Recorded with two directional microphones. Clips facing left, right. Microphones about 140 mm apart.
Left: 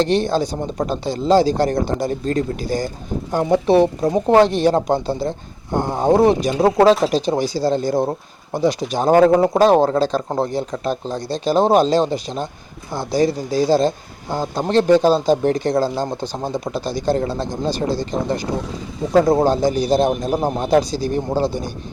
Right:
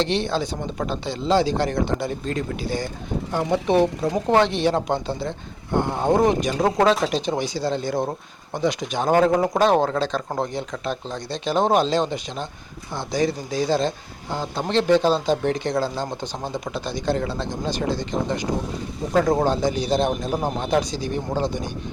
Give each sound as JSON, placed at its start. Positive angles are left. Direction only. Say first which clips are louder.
{"t": 0.0, "sound": "speech", "louder": "left 5 dB", "side_deg": 40}